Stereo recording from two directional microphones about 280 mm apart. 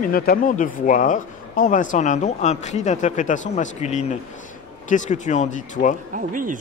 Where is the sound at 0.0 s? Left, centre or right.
Left.